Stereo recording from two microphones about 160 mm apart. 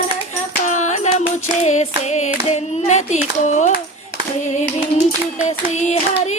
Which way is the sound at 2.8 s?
50° left (ahead or behind).